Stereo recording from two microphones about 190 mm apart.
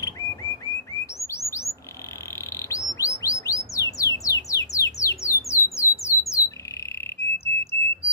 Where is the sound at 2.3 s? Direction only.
15° left (ahead or behind).